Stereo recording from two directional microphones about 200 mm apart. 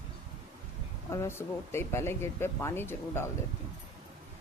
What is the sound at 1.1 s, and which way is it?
Speech, 15° left (ahead or behind).